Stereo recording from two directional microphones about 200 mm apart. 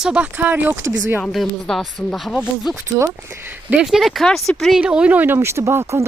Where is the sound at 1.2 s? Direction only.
Centre (ahead or behind).